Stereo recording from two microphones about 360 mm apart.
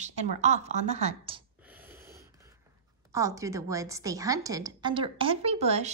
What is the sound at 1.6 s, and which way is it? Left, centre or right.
Snort, centre.